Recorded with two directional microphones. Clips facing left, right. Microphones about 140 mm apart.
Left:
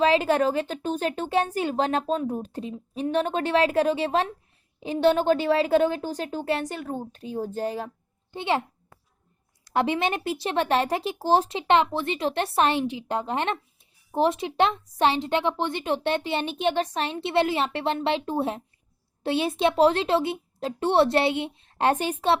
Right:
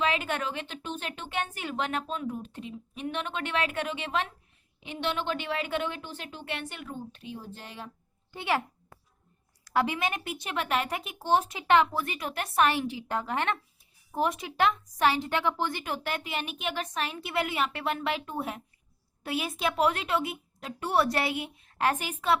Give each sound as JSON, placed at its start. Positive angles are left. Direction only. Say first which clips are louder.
{"t": 0.0, "sound": "speech", "louder": "left 9 dB", "side_deg": 35}
{"t": 8.3, "sound": "a child's voice", "louder": "left 4 dB", "side_deg": 25}
{"t": 9.6, "sound": "a woman's voice", "louder": "left 4 dB", "side_deg": 25}